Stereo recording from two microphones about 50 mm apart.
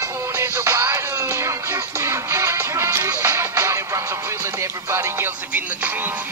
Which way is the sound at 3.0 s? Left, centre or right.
Right.